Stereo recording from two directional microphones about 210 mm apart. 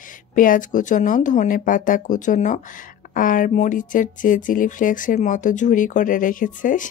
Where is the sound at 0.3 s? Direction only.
40° left (ahead or behind).